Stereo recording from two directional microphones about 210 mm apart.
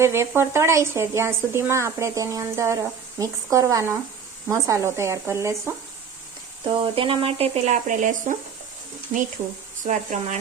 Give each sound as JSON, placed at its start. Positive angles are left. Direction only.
{"t": 0.0, "sound": "speech", "side_deg": -10}
{"t": 6.7, "sound": "speech", "side_deg": -25}
{"t": 9.8, "sound": "speech", "side_deg": -35}